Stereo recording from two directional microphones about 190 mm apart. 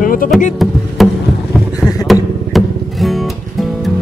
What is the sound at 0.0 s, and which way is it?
Vehicle, 45° left (ahead or behind).